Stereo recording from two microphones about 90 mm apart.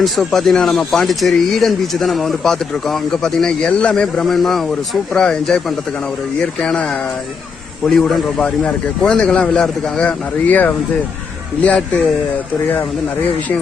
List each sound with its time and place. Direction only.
0.0 s a man's voice: centre (ahead or behind)
7.9 s a man's voice: 5° left (ahead or behind)